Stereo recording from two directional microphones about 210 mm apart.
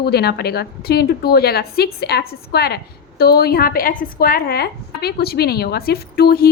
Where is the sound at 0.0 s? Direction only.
50° left (ahead or behind).